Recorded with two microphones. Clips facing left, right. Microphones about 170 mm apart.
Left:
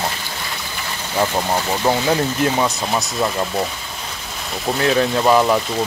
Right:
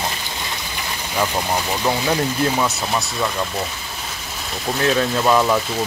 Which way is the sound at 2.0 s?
10° left (ahead or behind).